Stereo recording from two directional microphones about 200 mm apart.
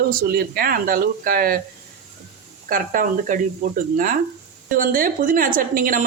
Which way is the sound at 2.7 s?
45° right (ahead or behind).